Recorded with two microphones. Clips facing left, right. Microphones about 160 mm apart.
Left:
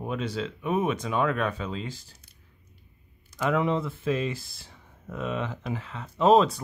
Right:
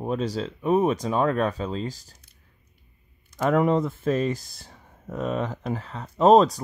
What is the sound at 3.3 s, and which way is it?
Speech, 40° right (ahead or behind).